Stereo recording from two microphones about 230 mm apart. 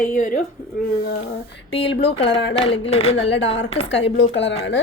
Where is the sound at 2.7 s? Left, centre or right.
Left.